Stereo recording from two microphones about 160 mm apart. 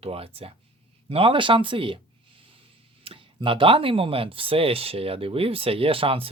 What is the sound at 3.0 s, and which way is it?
Speech, 35° right (ahead or behind).